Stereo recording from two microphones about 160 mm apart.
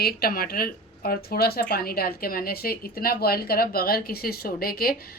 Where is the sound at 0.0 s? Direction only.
70° left (ahead or behind).